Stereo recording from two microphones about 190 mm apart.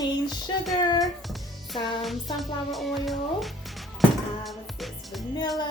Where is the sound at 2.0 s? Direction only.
Centre (ahead or behind).